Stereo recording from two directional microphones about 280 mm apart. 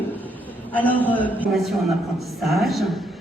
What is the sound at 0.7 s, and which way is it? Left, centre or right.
A woman's voice, centre.